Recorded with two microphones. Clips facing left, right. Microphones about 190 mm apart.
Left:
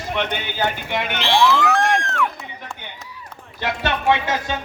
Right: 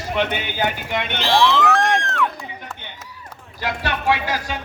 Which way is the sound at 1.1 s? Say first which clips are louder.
Right 1 dB; 40° right (ahead or behind).